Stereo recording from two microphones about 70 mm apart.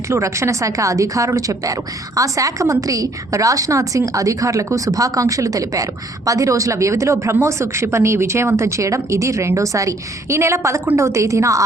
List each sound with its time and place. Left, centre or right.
0.1 s a woman's voice: right